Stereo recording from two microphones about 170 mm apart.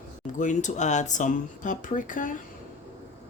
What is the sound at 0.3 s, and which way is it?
Speech, 45° left (ahead or behind).